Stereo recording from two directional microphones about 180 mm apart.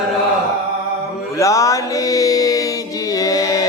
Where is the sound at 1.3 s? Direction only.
20° left (ahead or behind).